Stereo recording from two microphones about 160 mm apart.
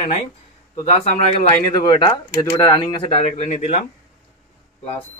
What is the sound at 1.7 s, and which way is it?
A man's voice, 30° left (ahead or behind).